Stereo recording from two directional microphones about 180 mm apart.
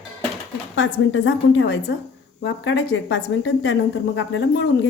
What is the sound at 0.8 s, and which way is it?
A woman's voice, 90° left.